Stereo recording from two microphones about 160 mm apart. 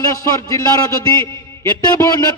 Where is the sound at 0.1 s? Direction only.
20° left (ahead or behind).